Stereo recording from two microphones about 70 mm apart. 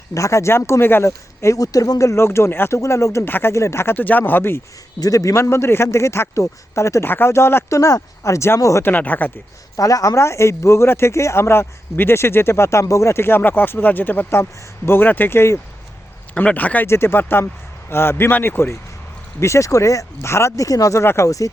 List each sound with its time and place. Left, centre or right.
0.1 s speech: left
1.0 s speech: left
3.2 s speech: left
3.5 s speech: left
4.9 s speech: left
8.8 s speech: left
9.7 s speech: left
12.8 s speech: left
16.3 s speech: left
16.8 s speech: left
19.4 s speech: left
20.7 s speech: left
21.0 s speech: left
21.2 s speech: left